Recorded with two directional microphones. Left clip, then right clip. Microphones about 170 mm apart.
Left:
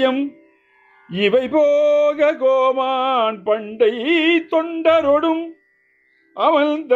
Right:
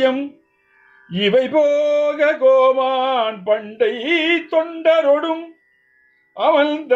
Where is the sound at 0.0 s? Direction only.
35° left (ahead or behind).